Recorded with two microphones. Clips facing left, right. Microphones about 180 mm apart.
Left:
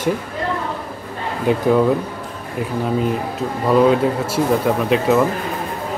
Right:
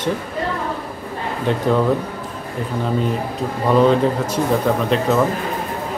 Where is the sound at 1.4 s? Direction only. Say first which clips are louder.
Left 3 dB; 10° left (ahead or behind).